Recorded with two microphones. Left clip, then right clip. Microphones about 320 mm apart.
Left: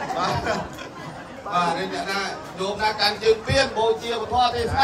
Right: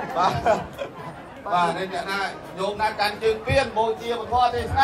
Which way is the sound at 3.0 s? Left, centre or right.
Right.